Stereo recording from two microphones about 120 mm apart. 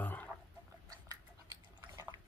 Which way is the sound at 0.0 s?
15° left (ahead or behind).